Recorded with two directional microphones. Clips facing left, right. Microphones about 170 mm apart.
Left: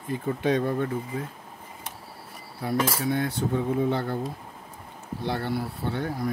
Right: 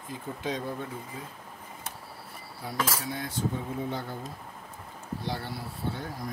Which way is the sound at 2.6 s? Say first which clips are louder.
Left 7 dB; 60° left (ahead or behind).